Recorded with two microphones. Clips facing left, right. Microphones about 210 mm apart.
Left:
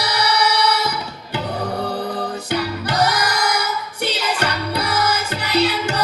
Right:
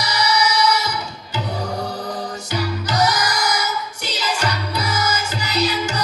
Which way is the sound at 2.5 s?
60° left (ahead or behind).